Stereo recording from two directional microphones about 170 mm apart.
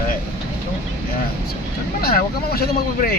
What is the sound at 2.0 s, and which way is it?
Speech, 65° left (ahead or behind).